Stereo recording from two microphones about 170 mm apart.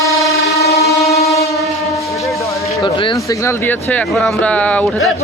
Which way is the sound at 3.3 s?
15° left (ahead or behind).